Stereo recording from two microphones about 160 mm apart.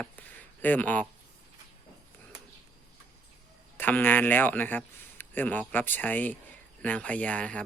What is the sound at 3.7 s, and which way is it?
Speech, 10° left (ahead or behind).